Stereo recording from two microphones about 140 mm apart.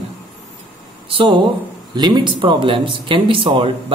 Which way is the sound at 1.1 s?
40° right (ahead or behind).